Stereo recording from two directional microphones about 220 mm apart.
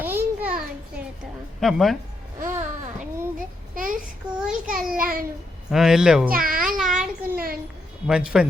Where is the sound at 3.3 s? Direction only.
40° right (ahead or behind).